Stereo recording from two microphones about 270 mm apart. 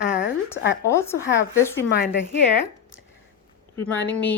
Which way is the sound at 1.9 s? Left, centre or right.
Left.